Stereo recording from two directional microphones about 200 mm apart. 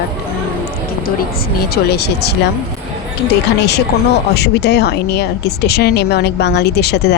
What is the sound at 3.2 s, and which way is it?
Speech, 55° left (ahead or behind).